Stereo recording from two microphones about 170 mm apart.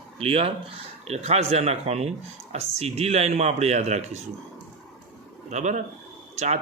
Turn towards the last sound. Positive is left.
turn(degrees=-40)  # may be behind; listen again after turning